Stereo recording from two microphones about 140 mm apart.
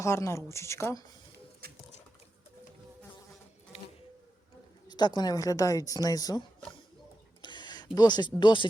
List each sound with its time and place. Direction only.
0.0 s speech: 20° left (ahead or behind)
4.9 s speech: 30° left (ahead or behind)
7.4 s a sound: 35° left (ahead or behind)
7.9 s speech: 30° left (ahead or behind)